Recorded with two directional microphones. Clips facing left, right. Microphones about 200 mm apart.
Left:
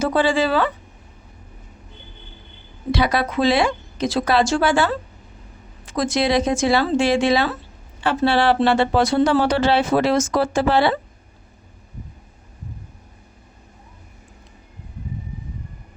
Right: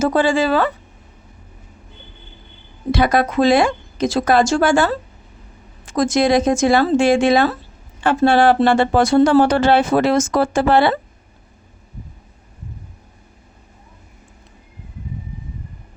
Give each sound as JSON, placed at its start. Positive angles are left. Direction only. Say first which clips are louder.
{"t": 0.0, "sound": "speech", "louder": "right 2 dB", "side_deg": -45}
{"t": 2.9, "sound": "speech", "louder": "right 4 dB", "side_deg": -50}